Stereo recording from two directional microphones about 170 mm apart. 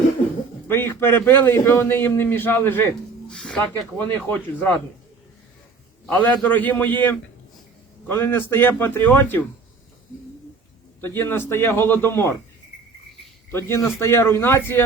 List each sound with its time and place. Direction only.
0.7 s a man's voice: 15° left (ahead or behind)
6.1 s a man's voice: 10° left (ahead or behind)
11.0 s a man's voice: 15° left (ahead or behind)
13.5 s a man's voice: 15° left (ahead or behind)